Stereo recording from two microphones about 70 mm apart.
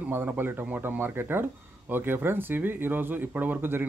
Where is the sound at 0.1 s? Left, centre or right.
Right.